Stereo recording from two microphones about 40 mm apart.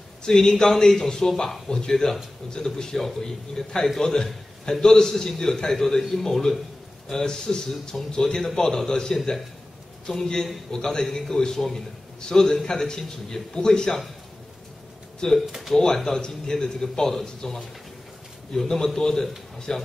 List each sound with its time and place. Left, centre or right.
0.2 s a man's voice: centre
15.2 s a man's voice: centre